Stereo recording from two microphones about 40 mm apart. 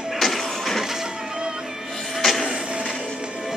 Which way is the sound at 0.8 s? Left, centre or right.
Centre.